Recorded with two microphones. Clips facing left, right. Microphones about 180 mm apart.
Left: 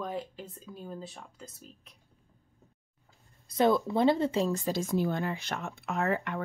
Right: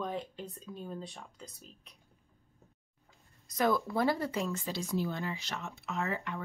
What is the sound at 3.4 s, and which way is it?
Speech, 25° left (ahead or behind).